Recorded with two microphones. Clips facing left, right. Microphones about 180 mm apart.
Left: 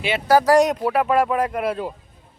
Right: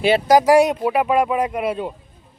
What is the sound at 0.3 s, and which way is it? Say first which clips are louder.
Speech: even; 15° right (ahead or behind).